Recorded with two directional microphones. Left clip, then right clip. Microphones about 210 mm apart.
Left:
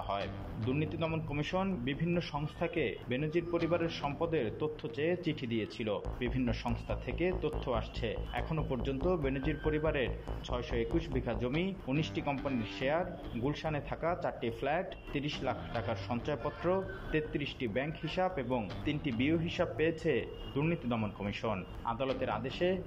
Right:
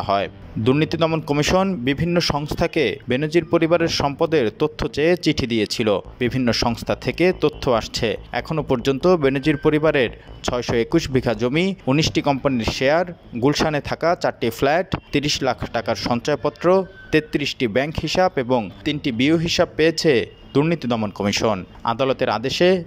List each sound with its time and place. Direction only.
0.0 s speech: 50° right (ahead or behind)